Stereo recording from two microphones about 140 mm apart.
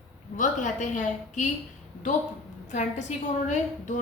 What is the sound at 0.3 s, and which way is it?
A woman's voice, 65° left (ahead or behind).